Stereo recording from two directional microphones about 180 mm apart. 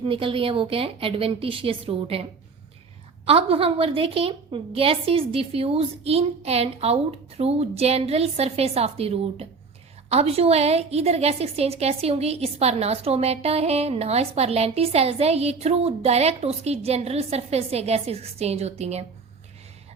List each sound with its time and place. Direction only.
0.0 s a woman's voice: 30° right (ahead or behind)
3.2 s a woman's voice: 30° right (ahead or behind)